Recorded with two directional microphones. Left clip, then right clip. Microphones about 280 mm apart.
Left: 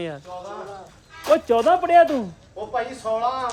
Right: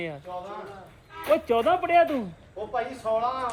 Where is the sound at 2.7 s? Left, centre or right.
Left.